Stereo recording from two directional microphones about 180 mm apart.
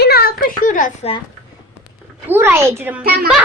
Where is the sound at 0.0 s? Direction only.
60° left (ahead or behind).